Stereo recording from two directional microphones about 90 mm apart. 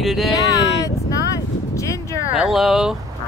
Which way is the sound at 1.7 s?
35° left (ahead or behind).